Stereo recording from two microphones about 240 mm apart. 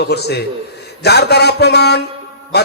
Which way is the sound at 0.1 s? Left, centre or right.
Left.